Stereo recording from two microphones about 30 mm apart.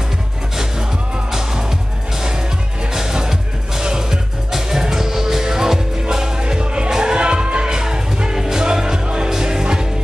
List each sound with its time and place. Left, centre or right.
1.3 s music: centre
6.6 s music: right